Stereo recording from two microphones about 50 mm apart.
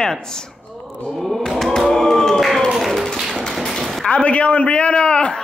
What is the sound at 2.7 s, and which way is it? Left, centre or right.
Tap, centre.